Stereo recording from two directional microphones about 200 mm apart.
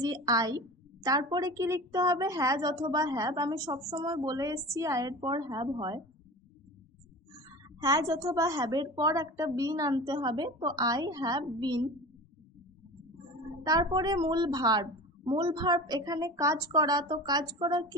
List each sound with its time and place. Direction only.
0.0 s a woman's voice: 20° right (ahead or behind)
7.8 s a woman's voice: 20° right (ahead or behind)
13.7 s a woman's voice: 20° right (ahead or behind)